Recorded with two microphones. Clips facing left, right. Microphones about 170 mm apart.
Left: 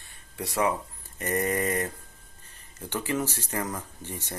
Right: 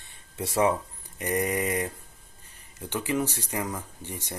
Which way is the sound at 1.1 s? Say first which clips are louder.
Even; 15° right (ahead or behind).